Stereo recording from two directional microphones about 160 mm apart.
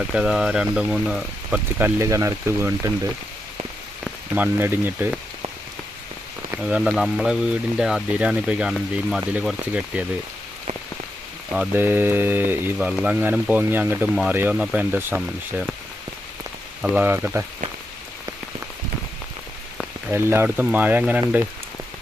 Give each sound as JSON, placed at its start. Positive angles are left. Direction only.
{"t": 0.1, "sound": "speech", "side_deg": -5}
{"t": 2.0, "sound": "speech", "side_deg": -20}
{"t": 6.5, "sound": "speech", "side_deg": -10}
{"t": 11.5, "sound": "speech", "side_deg": -10}
{"t": 16.8, "sound": "speech", "side_deg": -5}
{"t": 20.1, "sound": "speech", "side_deg": -15}